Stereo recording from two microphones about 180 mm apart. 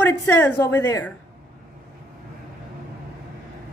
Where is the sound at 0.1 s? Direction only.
15° left (ahead or behind).